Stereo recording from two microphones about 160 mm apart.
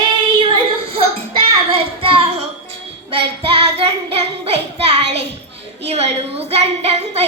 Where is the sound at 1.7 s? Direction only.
35° right (ahead or behind).